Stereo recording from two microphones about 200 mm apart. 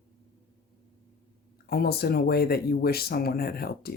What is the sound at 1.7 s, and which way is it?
Speech, 50° left (ahead or behind).